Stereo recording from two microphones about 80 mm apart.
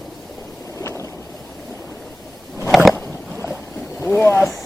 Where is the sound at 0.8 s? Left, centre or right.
Left.